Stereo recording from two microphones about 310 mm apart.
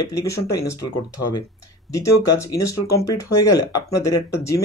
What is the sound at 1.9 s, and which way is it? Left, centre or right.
Speech, centre.